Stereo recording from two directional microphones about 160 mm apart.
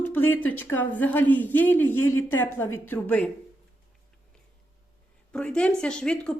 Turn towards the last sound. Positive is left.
turn(degrees=5)  # may be behind; listen again after turning